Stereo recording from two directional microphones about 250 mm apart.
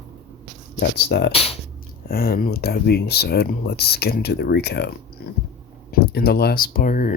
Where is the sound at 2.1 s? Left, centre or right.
Left.